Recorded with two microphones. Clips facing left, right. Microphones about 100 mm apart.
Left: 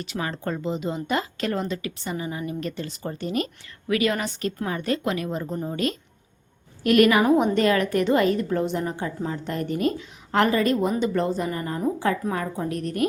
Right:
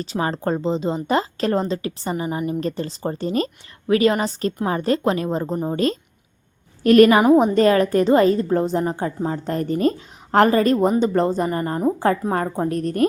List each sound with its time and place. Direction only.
0.0 s a woman's voice: 35° right (ahead or behind)